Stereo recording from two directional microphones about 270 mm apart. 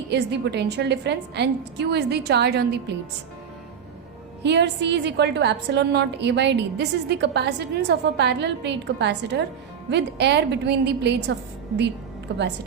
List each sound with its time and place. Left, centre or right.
0.1 s a woman's voice: right
4.4 s a woman's voice: right